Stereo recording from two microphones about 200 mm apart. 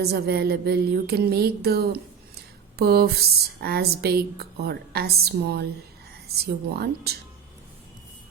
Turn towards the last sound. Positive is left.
turn(degrees=-55)  # may be behind; listen again after turning